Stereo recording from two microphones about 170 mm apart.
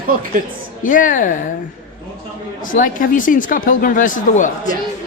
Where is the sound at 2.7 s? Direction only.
50° left (ahead or behind).